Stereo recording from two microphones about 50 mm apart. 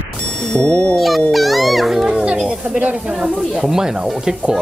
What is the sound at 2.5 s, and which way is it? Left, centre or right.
Speech, right.